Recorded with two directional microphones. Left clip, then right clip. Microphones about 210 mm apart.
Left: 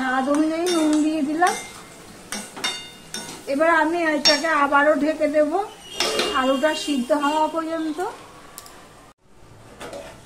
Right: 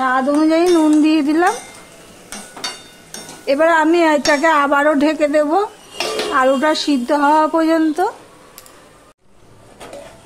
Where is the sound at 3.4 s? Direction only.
55° right (ahead or behind).